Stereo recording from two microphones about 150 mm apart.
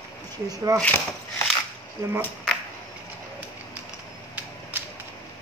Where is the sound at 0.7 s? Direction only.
20° right (ahead or behind).